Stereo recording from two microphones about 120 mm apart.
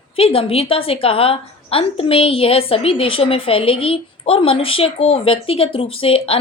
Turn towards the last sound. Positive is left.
turn(degrees=50)  # may be behind; listen again after turning